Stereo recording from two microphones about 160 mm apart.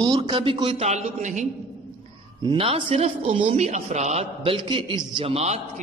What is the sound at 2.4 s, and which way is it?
A man's voice, 35° right (ahead or behind).